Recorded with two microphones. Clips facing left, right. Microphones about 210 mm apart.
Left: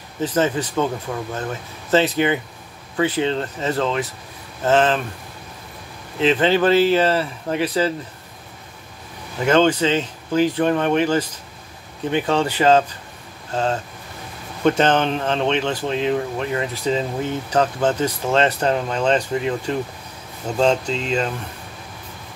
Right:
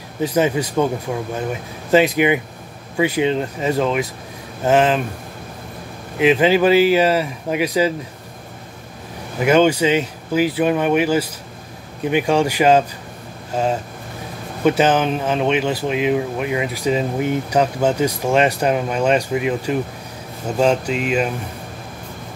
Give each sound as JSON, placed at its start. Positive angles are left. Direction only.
{"t": 0.2, "sound": "speech", "side_deg": -10}
{"t": 6.1, "sound": "speech", "side_deg": -10}
{"t": 9.4, "sound": "speech", "side_deg": -10}